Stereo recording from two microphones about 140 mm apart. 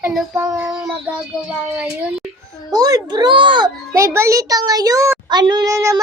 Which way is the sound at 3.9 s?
20° right (ahead or behind).